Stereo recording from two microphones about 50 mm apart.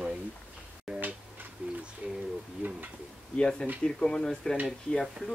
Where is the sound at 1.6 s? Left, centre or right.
Right.